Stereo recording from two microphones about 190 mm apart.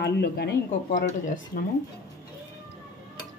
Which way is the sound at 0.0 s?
55° left (ahead or behind).